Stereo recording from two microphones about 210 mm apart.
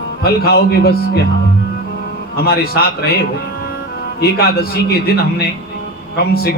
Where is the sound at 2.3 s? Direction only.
50° left (ahead or behind).